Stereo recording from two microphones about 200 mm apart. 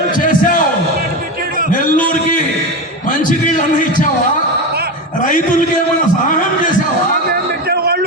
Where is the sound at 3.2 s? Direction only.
40° left (ahead or behind).